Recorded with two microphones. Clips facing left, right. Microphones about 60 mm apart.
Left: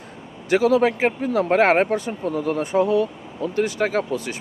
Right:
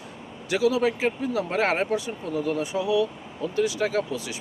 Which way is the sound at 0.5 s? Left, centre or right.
Left.